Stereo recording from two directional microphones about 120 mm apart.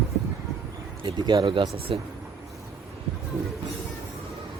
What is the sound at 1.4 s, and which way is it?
Speech, 50° right (ahead or behind).